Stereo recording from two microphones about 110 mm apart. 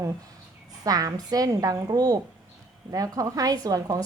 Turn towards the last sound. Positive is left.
turn(degrees=-35)  # may be behind; listen again after turning